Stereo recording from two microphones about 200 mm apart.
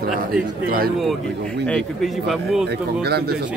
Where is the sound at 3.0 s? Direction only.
50° right (ahead or behind).